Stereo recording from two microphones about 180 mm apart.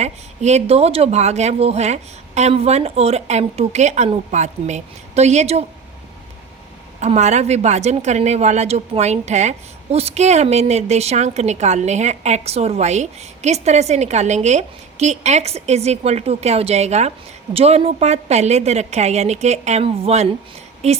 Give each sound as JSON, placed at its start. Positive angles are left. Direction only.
{"t": 0.0, "sound": "a woman's voice", "side_deg": -40}
{"t": 7.0, "sound": "a woman's voice", "side_deg": -40}